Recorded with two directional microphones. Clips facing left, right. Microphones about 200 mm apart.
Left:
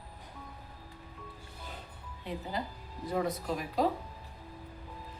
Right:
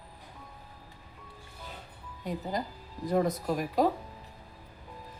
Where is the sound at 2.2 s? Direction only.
40° right (ahead or behind).